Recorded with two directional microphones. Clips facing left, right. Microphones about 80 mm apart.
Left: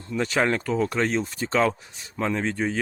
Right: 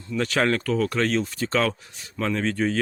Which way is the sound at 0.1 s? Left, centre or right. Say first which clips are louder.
Right 1 dB; centre.